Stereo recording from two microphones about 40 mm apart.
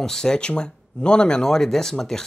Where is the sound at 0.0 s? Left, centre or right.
Centre.